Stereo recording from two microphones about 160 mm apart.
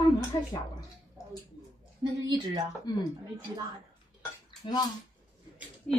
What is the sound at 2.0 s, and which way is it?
Speech, 25° right (ahead or behind).